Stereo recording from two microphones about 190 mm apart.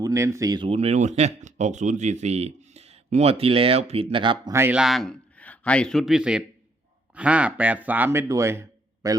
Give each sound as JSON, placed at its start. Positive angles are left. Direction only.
{"t": 0.0, "sound": "speech", "side_deg": -15}
{"t": 4.5, "sound": "a man's voice", "side_deg": -10}